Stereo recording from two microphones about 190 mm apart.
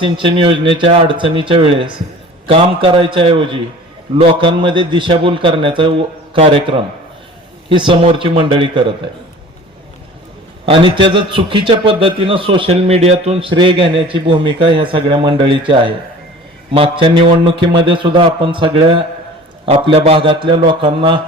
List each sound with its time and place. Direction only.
0.0 s a man's voice: 30° right (ahead or behind)
10.7 s a man's voice: 30° right (ahead or behind)